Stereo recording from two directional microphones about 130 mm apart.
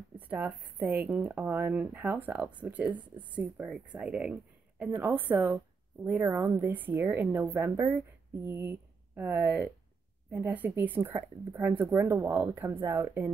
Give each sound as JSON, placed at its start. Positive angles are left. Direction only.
{"t": 0.3, "sound": "a woman's voice", "side_deg": -10}